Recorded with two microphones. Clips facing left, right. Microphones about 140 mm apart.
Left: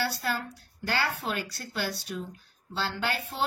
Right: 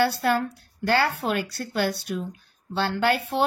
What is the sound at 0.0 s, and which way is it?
A woman's voice, 60° right (ahead or behind).